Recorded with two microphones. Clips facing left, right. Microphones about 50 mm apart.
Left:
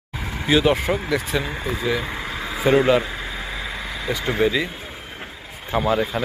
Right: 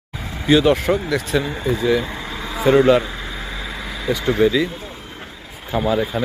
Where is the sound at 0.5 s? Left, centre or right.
Centre.